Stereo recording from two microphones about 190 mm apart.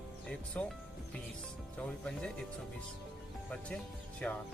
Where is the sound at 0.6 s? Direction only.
5° left (ahead or behind).